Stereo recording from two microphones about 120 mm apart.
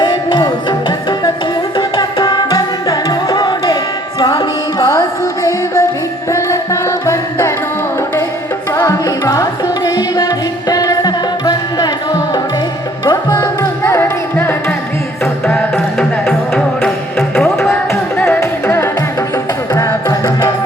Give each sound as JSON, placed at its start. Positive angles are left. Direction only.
{"t": 0.0, "sound": "music", "side_deg": 35}
{"t": 8.7, "sound": "music", "side_deg": 25}
{"t": 13.1, "sound": "music", "side_deg": 25}
{"t": 17.2, "sound": "music", "side_deg": 20}